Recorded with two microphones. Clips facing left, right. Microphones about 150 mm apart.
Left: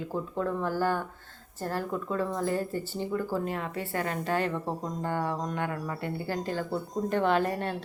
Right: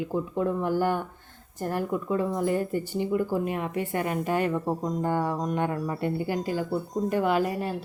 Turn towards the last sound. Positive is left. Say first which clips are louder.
# right 1 dB
turn(degrees=-5)  # may be behind; listen again after turning